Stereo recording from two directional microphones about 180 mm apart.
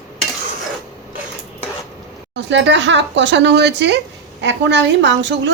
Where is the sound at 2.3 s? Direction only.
75° right (ahead or behind).